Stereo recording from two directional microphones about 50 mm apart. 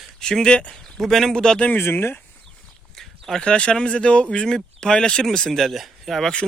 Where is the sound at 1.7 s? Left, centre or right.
Left.